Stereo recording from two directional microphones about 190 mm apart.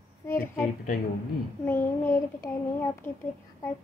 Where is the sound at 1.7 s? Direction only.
10° left (ahead or behind).